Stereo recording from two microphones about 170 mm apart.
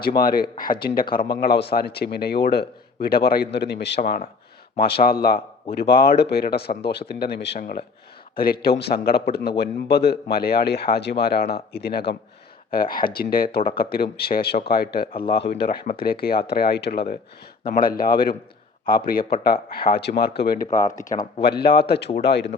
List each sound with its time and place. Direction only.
0.2 s a man's voice: 60° left (ahead or behind); by 4.0 s 85° left
4.0 s a man's voice: 60° left (ahead or behind); by 7.9 s 75° left (ahead or behind)
8.4 s a man's voice: 60° left (ahead or behind)
12.7 s a man's voice: 60° left (ahead or behind)
20.7 s speech: 45° left (ahead or behind)
21.4 s a man's voice: 70° left (ahead or behind)